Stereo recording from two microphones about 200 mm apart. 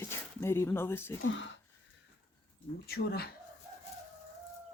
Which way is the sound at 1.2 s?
70° left (ahead or behind).